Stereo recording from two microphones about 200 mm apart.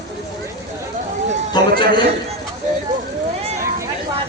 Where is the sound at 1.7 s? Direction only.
50° right (ahead or behind).